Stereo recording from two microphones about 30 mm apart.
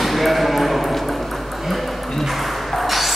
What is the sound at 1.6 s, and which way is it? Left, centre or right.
Ping, centre.